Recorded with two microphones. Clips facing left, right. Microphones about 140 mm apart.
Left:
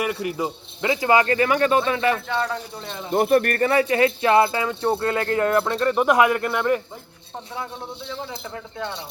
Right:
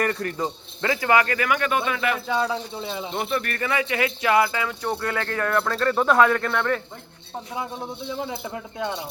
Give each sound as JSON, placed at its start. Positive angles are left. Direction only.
{"t": 0.0, "sound": "speech", "side_deg": 10}
{"t": 0.9, "sound": "speech", "side_deg": 25}
{"t": 2.2, "sound": "speech", "side_deg": -10}
{"t": 3.1, "sound": "speech", "side_deg": 50}
{"t": 7.5, "sound": "speech", "side_deg": -15}